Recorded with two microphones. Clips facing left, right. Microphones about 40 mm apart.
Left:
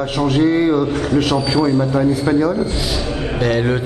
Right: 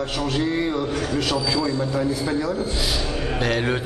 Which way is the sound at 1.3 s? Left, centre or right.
Left.